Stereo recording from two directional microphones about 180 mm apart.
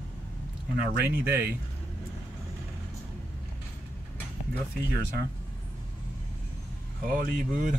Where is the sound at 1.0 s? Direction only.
10° right (ahead or behind).